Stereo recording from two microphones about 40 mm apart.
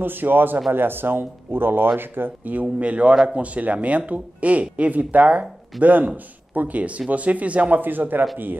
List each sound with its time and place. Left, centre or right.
0.0 s speech: right
2.4 s speech: right
7.8 s speech: right